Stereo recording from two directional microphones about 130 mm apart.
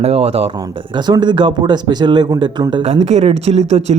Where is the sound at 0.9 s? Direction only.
35° right (ahead or behind).